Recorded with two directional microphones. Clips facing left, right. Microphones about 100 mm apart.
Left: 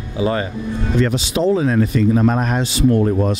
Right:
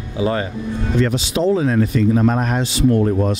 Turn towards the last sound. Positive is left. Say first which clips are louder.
# even
turn(degrees=30)  # may be behind; listen again after turning